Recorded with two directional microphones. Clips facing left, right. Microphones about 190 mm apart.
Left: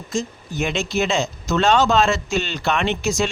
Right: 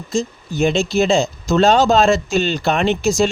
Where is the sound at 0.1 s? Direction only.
30° right (ahead or behind).